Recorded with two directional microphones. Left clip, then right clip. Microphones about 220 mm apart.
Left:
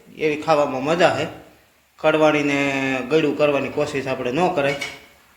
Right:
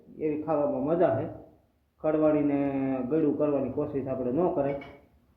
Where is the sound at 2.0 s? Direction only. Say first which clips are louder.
Left 8 dB; 15° left (ahead or behind).